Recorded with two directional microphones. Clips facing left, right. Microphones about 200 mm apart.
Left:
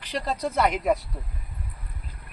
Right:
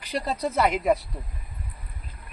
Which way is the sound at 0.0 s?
10° right (ahead or behind).